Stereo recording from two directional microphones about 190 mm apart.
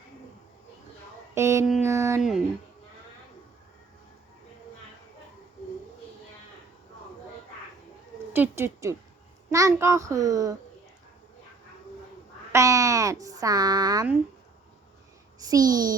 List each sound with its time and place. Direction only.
1.4 s speech: 15° right (ahead or behind)
8.3 s speech: 10° right (ahead or behind)
12.5 s speech: 15° right (ahead or behind)
15.4 s a child's voice: 20° right (ahead or behind)